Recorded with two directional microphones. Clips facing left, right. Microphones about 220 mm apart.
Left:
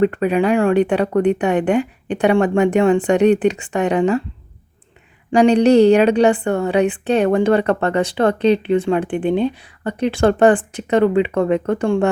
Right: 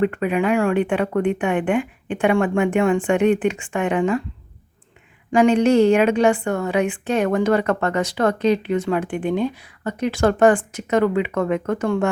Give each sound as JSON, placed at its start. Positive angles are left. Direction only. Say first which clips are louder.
{"t": 0.0, "sound": "a woman's voice", "louder": "left 4 dB", "side_deg": 35}
{"t": 5.3, "sound": "a woman's voice", "louder": "left 3 dB", "side_deg": 35}